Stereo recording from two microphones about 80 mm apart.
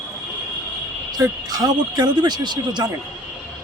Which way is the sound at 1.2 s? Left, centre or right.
Right.